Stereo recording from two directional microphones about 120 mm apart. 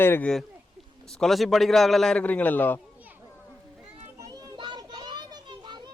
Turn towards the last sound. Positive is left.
turn(degrees=-35)  # may be behind; listen again after turning